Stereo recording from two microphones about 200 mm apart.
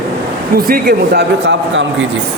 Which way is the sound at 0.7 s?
50° right (ahead or behind).